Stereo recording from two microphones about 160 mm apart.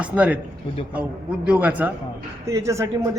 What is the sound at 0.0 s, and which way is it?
Speech, 10° right (ahead or behind).